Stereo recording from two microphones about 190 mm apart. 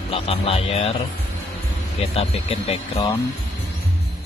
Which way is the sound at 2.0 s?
30° left (ahead or behind).